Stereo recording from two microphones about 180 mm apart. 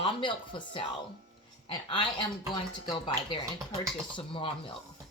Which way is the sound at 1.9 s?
25° left (ahead or behind).